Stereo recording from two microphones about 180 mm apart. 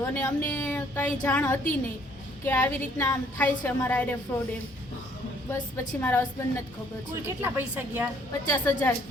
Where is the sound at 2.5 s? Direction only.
15° left (ahead or behind).